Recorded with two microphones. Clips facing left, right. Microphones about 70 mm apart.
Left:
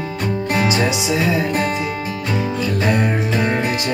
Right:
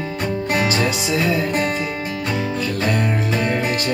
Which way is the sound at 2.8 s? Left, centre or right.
Centre.